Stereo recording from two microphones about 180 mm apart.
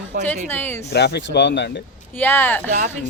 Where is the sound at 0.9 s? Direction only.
65° left (ahead or behind).